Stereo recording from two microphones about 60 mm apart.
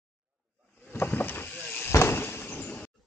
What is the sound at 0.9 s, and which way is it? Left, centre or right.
Vehicle, left.